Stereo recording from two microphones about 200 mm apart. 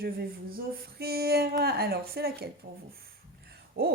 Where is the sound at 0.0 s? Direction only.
50° right (ahead or behind).